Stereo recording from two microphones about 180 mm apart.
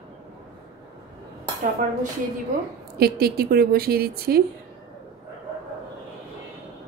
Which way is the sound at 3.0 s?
60° right (ahead or behind).